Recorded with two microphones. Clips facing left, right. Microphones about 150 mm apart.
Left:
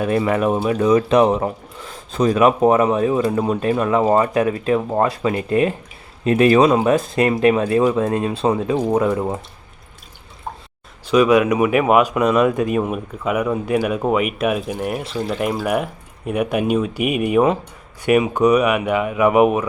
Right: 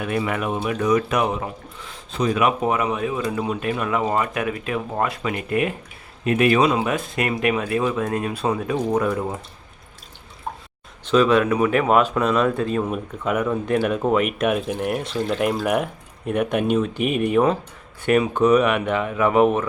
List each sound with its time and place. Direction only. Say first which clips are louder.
0.0 s speech: left 6 dB; 35° left (ahead or behind)
11.1 s speech: left 3 dB; 15° left (ahead or behind)